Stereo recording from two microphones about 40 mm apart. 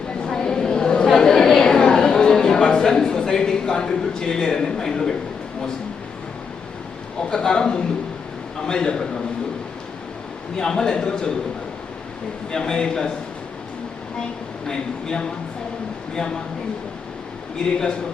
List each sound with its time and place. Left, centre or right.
0.3 s a sound: centre
7.3 s a man's voice: centre
10.6 s a man's voice: centre
12.5 s a man's voice: centre
16.1 s a man's voice: centre
17.6 s a man's voice: left